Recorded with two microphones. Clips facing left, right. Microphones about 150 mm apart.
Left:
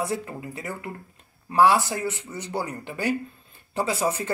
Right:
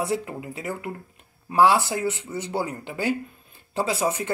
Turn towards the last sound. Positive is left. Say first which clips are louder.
# right 1 dB
turn(degrees=-15)  # may be behind; listen again after turning